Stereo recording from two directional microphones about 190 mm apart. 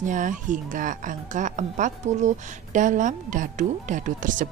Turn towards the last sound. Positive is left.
turn(degrees=-45)  # may be behind; listen again after turning